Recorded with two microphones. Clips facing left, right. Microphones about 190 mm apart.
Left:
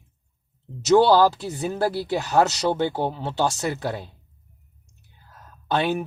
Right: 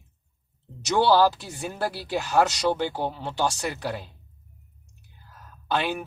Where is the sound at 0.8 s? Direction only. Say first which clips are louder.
Left 4 dB; 20° left (ahead or behind).